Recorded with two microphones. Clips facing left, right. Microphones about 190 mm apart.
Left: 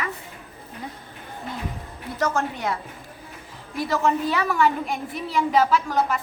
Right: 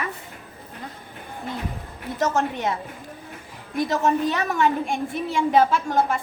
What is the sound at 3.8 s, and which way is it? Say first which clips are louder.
A woman's voice: right 1 dB; 25° right (ahead or behind).